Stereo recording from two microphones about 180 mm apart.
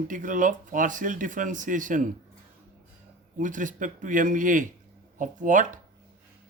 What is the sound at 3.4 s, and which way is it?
Speech, 45° right (ahead or behind).